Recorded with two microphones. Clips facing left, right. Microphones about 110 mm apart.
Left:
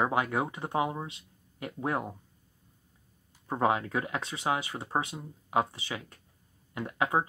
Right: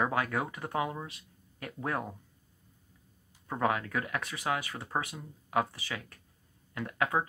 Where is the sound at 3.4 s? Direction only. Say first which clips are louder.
Left 3 dB; 25° left (ahead or behind).